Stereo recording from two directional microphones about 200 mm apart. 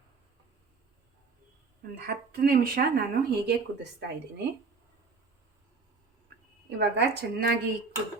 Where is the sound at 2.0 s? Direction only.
50° right (ahead or behind).